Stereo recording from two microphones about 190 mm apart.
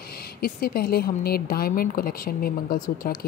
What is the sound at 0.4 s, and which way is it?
Speech, 50° left (ahead or behind).